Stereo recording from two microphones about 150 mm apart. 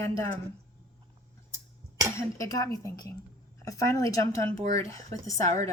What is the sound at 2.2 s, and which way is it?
Speech, 20° left (ahead or behind).